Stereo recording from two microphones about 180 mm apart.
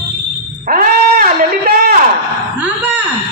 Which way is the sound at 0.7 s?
50° right (ahead or behind).